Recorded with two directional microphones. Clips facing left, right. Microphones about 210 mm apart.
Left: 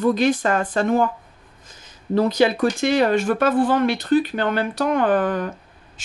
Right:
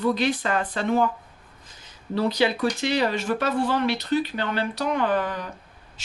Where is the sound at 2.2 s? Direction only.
45° left (ahead or behind).